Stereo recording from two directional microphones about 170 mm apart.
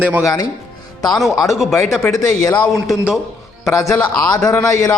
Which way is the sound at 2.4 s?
25° left (ahead or behind).